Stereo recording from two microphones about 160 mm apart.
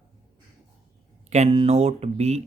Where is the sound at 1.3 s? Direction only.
40° right (ahead or behind).